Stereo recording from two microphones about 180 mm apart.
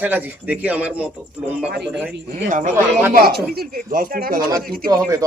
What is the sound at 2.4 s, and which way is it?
Speech, 45° right (ahead or behind).